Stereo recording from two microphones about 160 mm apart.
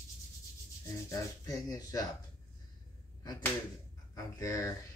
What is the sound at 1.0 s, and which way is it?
Speech, 20° left (ahead or behind).